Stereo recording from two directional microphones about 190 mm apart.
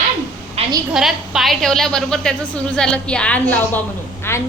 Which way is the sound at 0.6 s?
35° right (ahead or behind).